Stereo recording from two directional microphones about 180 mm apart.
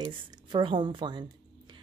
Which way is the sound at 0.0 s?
25° right (ahead or behind).